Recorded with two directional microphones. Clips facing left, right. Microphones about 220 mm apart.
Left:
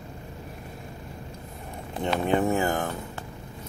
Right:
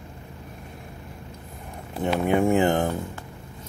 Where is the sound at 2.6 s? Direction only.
25° right (ahead or behind).